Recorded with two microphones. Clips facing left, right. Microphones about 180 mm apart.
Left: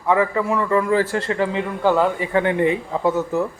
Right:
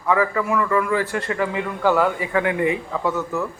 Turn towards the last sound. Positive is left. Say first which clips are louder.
# left 4 dB
turn(degrees=25)  # may be behind; listen again after turning